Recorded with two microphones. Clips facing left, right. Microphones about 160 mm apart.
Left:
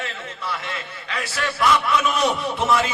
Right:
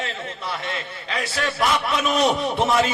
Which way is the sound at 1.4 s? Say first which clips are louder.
Left 2 dB; 35° right (ahead or behind).